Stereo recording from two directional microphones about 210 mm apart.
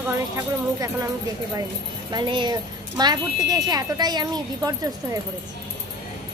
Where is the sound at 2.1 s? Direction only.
20° right (ahead or behind).